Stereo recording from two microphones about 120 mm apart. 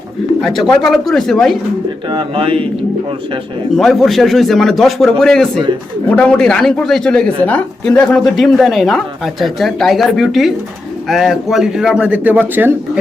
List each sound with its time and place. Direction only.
0.4 s speech: centre (ahead or behind)
2.0 s speech: 45° right (ahead or behind)
3.8 s speech: centre (ahead or behind); by 12.7 s 15° right (ahead or behind)